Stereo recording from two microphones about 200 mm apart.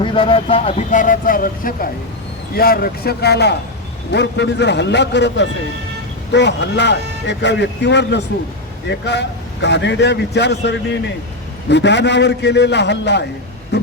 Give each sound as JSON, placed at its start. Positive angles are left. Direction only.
{"t": 0.0, "sound": "a man's voice", "side_deg": 25}